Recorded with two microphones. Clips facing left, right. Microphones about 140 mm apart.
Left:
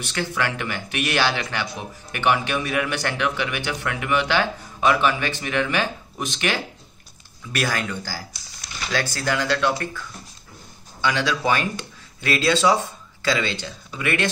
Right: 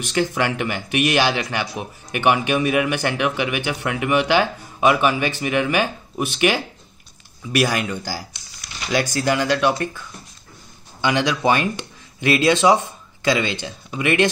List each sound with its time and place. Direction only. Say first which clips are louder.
0.0 s speech: right 5 dB; 15° right (ahead or behind)